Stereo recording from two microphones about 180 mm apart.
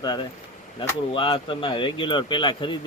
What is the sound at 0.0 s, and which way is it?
Speech, 25° left (ahead or behind).